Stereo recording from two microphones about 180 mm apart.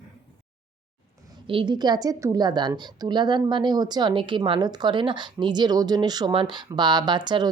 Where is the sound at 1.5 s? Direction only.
25° right (ahead or behind).